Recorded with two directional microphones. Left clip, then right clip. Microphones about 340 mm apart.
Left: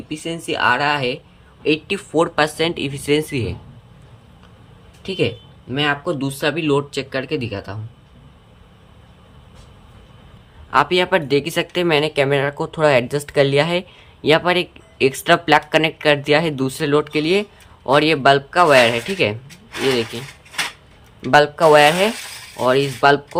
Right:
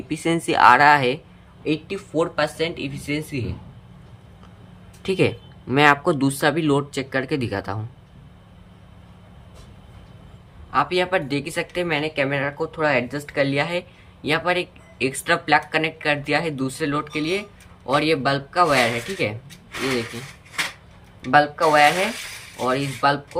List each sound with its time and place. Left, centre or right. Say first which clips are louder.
0.1 s speech: right 3 dB; centre
5.0 s speech: even; centre
10.7 s speech: left 5 dB; centre
21.2 s speech: left 5 dB; centre